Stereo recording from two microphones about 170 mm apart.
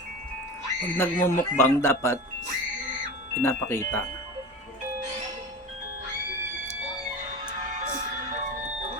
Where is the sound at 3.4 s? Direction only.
15° left (ahead or behind).